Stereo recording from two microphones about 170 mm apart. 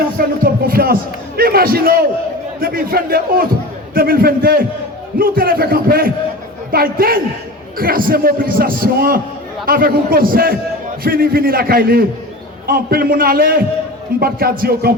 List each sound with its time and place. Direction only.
0.2 s a man's voice: 60° right (ahead or behind)